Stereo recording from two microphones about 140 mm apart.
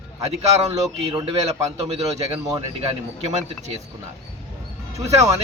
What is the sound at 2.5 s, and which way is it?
Speech, 45° right (ahead or behind).